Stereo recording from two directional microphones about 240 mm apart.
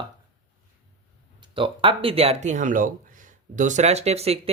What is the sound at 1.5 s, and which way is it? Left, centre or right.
Speech, right.